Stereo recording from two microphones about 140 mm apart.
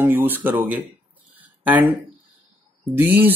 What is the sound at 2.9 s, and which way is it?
Speech, 15° right (ahead or behind).